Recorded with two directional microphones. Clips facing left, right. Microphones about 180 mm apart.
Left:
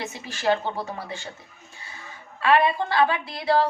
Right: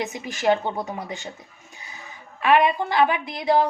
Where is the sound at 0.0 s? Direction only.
15° right (ahead or behind).